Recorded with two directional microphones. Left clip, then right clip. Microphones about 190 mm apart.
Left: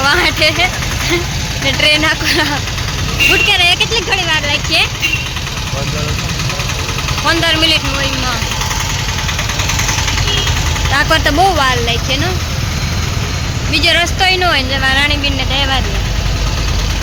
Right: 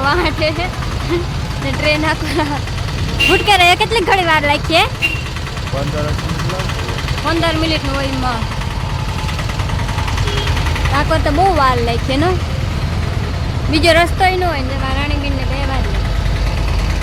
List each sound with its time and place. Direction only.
0.0 s vehicle: 5° right (ahead or behind)
1.6 s speech: 5° right (ahead or behind)
3.4 s speech: 30° right (ahead or behind)
7.3 s speech: 10° right (ahead or behind)
10.9 s speech: 5° left (ahead or behind)
11.6 s speech: 20° right (ahead or behind)
13.7 s speech: 20° right (ahead or behind); by 15.1 s 5° left (ahead or behind)